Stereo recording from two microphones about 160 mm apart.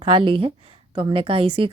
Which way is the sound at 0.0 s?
35° right (ahead or behind).